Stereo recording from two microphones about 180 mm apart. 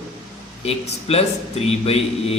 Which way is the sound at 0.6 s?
35° left (ahead or behind).